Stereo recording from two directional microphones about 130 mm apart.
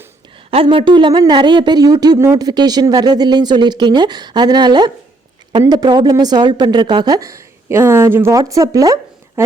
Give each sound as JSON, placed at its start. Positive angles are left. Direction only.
{"t": 0.5, "sound": "speech", "side_deg": -45}